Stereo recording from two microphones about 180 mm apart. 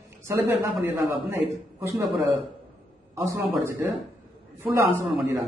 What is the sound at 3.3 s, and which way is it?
A man's voice, 15° right (ahead or behind).